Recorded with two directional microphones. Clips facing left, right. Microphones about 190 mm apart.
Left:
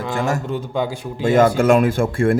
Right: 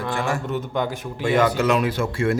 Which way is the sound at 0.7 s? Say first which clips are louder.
Left 3 dB; 10° left (ahead or behind).